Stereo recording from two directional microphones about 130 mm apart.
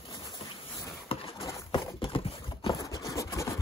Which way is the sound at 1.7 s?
40° left (ahead or behind).